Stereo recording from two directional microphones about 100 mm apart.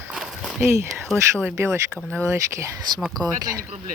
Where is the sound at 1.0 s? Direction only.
10° left (ahead or behind).